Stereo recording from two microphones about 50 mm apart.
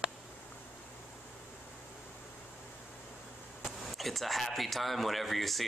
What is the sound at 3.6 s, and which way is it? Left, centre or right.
Speech, centre.